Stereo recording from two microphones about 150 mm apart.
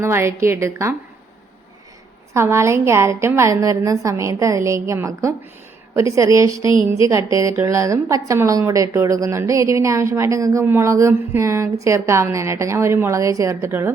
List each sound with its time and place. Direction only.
0.0 s speech: 15° right (ahead or behind)
2.3 s speech: 20° right (ahead or behind)